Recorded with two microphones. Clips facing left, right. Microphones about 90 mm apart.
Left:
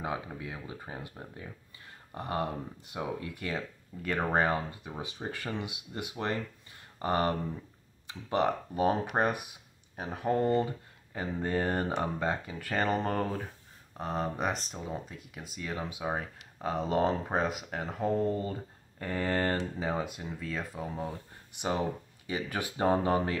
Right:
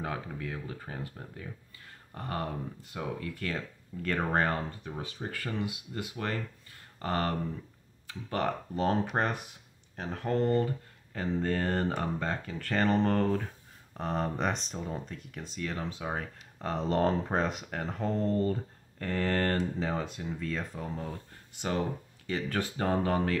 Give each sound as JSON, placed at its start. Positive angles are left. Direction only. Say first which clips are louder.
{"t": 0.0, "sound": "speech", "louder": "even", "side_deg": 15}